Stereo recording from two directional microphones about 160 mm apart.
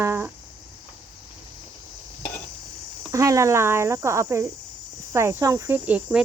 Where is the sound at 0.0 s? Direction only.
15° right (ahead or behind).